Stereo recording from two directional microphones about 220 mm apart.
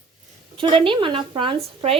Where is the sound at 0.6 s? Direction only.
25° right (ahead or behind).